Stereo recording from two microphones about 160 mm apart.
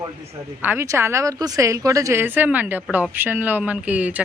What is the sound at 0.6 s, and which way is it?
Speech, 15° right (ahead or behind).